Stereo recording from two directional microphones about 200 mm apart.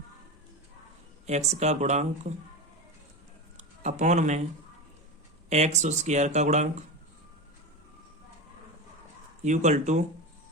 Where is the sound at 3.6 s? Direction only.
35° right (ahead or behind).